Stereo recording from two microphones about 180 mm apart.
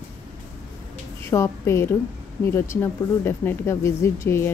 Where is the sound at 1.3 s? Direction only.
15° left (ahead or behind).